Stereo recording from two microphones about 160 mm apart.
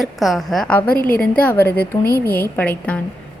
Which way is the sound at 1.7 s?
75° left (ahead or behind).